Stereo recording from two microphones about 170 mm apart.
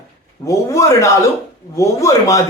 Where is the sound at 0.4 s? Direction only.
20° left (ahead or behind).